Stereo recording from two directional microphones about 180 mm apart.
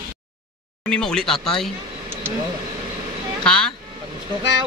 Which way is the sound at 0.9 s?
5° left (ahead or behind).